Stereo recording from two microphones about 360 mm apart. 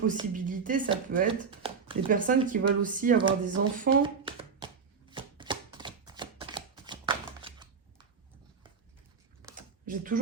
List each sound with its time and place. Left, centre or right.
0.0 s speech: right
3.8 s a sound: centre
5.1 s chopping: centre
9.8 s speech: right